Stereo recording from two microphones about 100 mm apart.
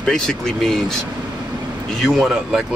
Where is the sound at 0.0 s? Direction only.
5° left (ahead or behind).